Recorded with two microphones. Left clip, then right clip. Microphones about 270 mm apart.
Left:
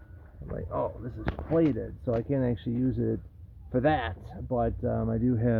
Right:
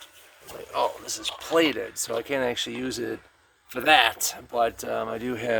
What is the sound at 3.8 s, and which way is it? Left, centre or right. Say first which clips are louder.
Speech: right 10 dB; centre.